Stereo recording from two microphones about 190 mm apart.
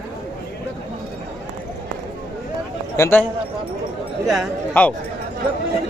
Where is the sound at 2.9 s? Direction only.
15° left (ahead or behind).